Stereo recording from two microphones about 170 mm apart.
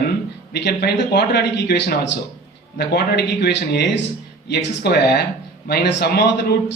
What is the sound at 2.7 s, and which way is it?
A man's voice, 75° left (ahead or behind).